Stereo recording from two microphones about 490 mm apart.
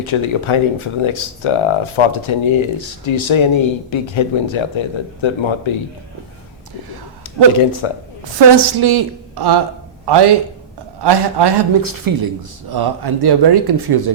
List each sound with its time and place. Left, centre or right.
0.0 s speech: left
7.5 s speech: left
8.6 s a man's voice: right